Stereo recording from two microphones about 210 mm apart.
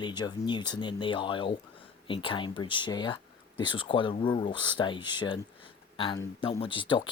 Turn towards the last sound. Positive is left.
turn(degrees=25)  # may be behind; listen again after turning